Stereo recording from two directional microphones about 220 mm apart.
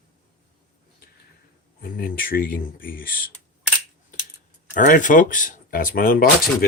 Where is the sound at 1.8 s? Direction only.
40° left (ahead or behind).